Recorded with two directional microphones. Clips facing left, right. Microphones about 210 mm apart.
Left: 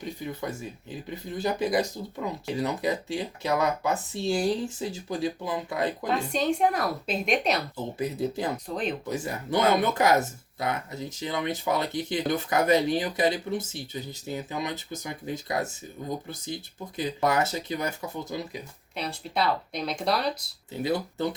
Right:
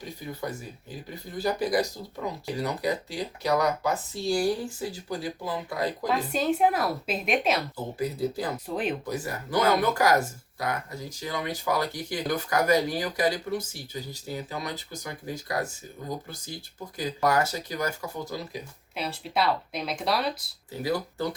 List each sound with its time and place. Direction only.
1.4 s speech: 25° left (ahead or behind)
6.1 s speech: 5° right (ahead or behind)
7.9 s speech: 20° left (ahead or behind)
8.7 s speech: 5° right (ahead or behind)
9.0 s speech: 20° left (ahead or behind)
18.9 s speech: 5° right (ahead or behind)
20.8 s speech: 25° left (ahead or behind)